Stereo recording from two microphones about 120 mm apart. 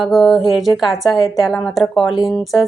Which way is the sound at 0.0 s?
Centre (ahead or behind).